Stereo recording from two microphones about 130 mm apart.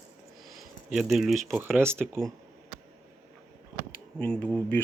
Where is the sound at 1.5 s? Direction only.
15° right (ahead or behind).